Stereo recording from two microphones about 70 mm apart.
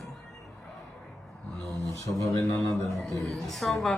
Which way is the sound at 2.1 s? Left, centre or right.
Left.